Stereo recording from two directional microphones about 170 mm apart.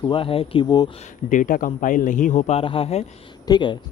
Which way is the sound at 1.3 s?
50° left (ahead or behind).